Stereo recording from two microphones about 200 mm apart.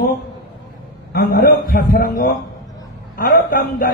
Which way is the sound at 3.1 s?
45° left (ahead or behind).